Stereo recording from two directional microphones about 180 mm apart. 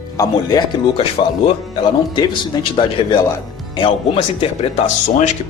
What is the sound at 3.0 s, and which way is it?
Speech, 30° left (ahead or behind).